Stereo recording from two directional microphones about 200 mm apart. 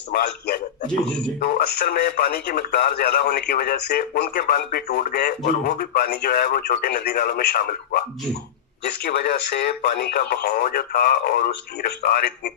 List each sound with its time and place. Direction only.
0.1 s speech: 55° left (ahead or behind)